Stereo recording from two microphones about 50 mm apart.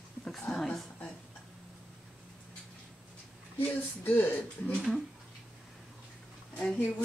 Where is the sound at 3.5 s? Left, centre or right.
Left.